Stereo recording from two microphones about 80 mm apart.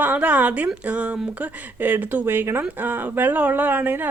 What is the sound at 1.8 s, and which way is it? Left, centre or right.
Speech, right.